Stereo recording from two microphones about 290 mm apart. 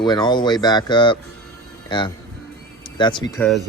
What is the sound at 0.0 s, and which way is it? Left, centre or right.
Speech, centre.